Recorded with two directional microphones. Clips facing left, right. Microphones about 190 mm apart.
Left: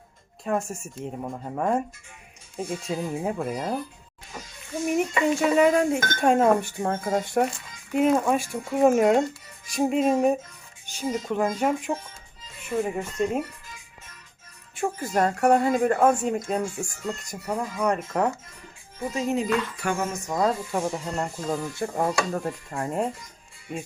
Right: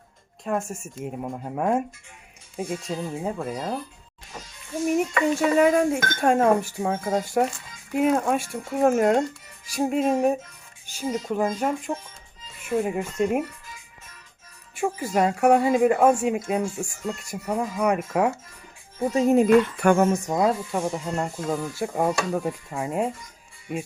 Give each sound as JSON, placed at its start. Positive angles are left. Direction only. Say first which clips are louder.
{"t": 0.4, "sound": "speech", "louder": "even", "side_deg": 0}
{"t": 5.3, "sound": "speech", "louder": "right 1 dB", "side_deg": 0}
{"t": 11.4, "sound": "speech", "louder": "left 1 dB", "side_deg": 5}
{"t": 12.8, "sound": "a woman's voice", "louder": "left 1 dB", "side_deg": -10}
{"t": 14.8, "sound": "a woman's voice", "louder": "right 1 dB", "side_deg": -10}
{"t": 19.1, "sound": "speech", "louder": "right 8 dB", "side_deg": -50}
{"t": 20.3, "sound": "speech", "louder": "right 2 dB", "side_deg": -10}